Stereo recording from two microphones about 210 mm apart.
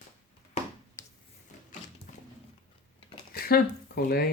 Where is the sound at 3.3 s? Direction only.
45° left (ahead or behind).